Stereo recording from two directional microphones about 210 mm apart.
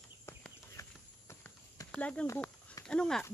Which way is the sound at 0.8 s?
15° left (ahead or behind).